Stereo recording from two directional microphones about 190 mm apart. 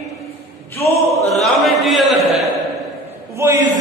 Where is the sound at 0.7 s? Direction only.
35° left (ahead or behind).